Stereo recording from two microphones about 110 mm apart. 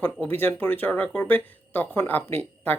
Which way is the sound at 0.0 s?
15° left (ahead or behind).